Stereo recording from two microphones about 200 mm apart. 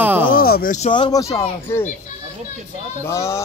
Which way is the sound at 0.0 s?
10° right (ahead or behind).